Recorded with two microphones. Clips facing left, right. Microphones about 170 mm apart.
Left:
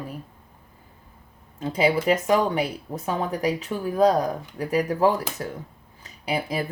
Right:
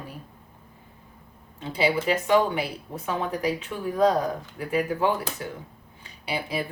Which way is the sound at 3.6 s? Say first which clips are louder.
Left 3 dB; 35° left (ahead or behind).